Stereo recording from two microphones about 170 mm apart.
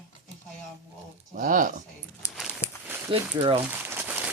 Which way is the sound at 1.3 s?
50° right (ahead or behind).